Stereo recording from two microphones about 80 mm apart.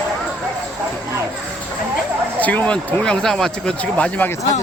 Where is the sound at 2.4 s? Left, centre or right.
Centre.